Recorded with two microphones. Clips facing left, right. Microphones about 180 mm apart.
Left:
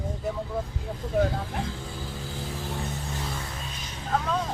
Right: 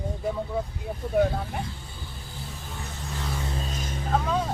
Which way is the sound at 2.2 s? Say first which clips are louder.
Left 5 dB; 90° left.